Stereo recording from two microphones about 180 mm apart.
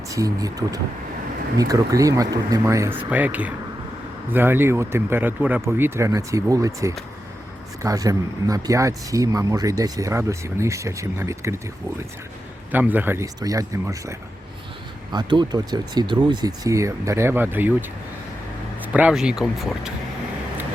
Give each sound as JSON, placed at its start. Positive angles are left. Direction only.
{"t": 0.1, "sound": "speech", "side_deg": -20}
{"t": 12.7, "sound": "speech", "side_deg": -10}